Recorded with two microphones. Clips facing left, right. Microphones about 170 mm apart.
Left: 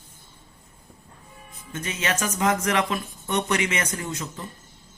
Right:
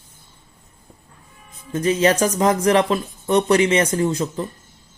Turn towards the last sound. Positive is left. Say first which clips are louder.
# right 12 dB
turn(degrees=-35)  # may be behind; listen again after turning